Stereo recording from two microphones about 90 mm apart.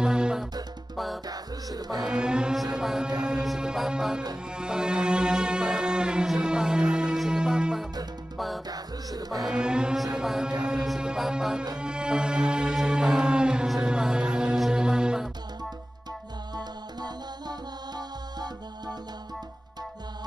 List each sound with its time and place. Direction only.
0.0 s music: 10° right (ahead or behind)
1.3 s music: 45° right (ahead or behind)
2.0 s music: 10° right (ahead or behind)
3.4 s mantra: 5° right (ahead or behind)
4.6 s music: 10° right (ahead or behind)
8.6 s music: 45° right (ahead or behind)
9.5 s mantra: 10° right (ahead or behind)
11.8 s music: 10° right (ahead or behind)
16.5 s music: 50° right (ahead or behind)